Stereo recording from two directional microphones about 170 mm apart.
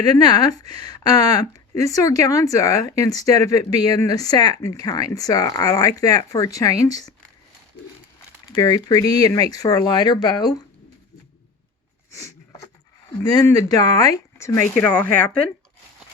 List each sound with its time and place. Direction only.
0.0 s speech: 25° left (ahead or behind)
8.5 s speech: 20° left (ahead or behind)
12.1 s a sound: 20° left (ahead or behind)
13.2 s speech: 20° left (ahead or behind)